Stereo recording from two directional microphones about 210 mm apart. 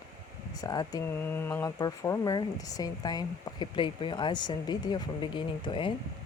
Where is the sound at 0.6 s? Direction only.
20° left (ahead or behind).